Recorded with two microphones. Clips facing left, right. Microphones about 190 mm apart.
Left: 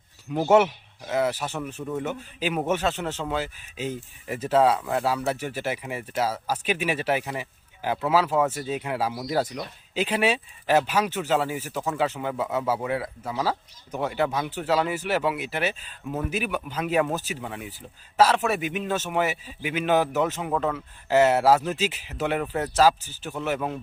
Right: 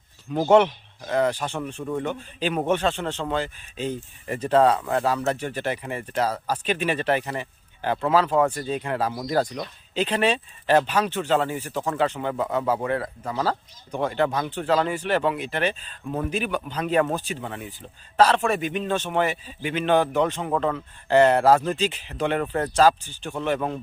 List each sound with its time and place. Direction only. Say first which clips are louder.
0.3 s speech: right 2 dB; 5° left (ahead or behind)